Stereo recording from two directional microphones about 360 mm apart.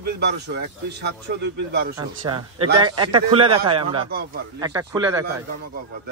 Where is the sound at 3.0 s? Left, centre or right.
Centre.